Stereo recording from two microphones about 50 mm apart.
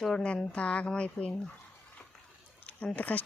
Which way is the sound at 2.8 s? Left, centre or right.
Left.